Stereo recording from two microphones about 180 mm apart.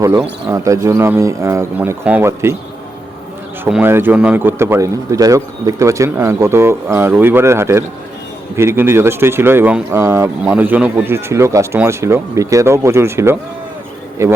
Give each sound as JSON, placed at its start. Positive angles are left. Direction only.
{"t": 0.0, "sound": "a man's voice", "side_deg": -20}
{"t": 3.6, "sound": "a man's voice", "side_deg": -10}